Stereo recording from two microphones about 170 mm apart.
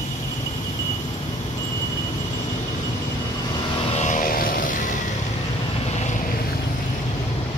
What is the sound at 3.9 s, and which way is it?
Vehicle, 45° left (ahead or behind).